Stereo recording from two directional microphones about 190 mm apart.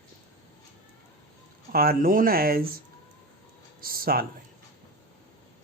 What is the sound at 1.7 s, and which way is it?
Speech, 50° right (ahead or behind).